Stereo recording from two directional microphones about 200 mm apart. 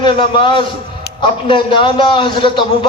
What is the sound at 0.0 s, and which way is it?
A man's voice, 25° left (ahead or behind).